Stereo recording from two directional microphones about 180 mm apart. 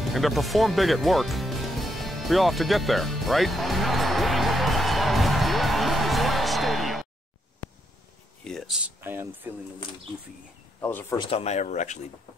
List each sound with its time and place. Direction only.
0.0 s music: centre (ahead or behind)
8.5 s speech: centre (ahead or behind)
10.8 s speech: 10° left (ahead or behind)
11.1 s speech: 35° left (ahead or behind)